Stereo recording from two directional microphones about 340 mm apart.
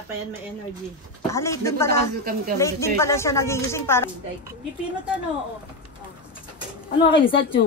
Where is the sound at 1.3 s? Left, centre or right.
Centre.